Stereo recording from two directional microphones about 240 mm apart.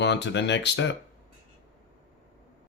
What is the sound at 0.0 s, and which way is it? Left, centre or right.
Speech, left.